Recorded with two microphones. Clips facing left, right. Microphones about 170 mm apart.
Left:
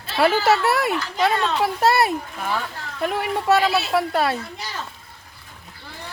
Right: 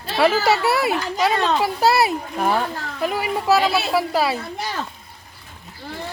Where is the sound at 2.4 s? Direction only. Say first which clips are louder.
Right 9 dB; 50° right (ahead or behind).